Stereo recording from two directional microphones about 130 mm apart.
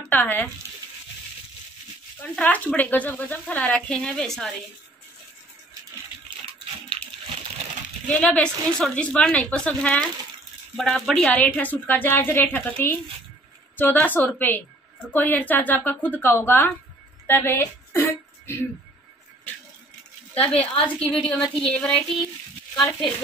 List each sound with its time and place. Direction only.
0.0 s speech: 15° left (ahead or behind)
2.2 s speech: 10° left (ahead or behind)
8.1 s speech: 10° left (ahead or behind)
17.3 s a sound: 20° left (ahead or behind)
20.3 s speech: 10° left (ahead or behind)